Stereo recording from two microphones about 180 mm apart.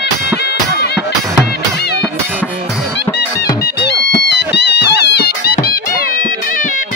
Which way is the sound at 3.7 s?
65° left (ahead or behind).